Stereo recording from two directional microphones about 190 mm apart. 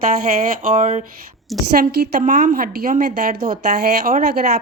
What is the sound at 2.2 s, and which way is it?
A woman's voice, 40° right (ahead or behind).